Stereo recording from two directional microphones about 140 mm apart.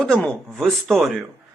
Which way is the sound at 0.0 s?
5° left (ahead or behind).